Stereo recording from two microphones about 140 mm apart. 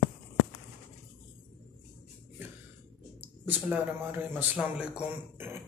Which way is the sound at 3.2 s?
10° right (ahead or behind).